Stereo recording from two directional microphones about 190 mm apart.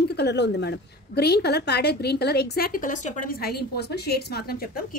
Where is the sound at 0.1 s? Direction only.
60° left (ahead or behind).